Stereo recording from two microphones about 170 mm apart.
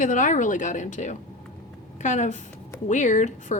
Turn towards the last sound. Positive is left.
turn(degrees=45)  # may be behind; listen again after turning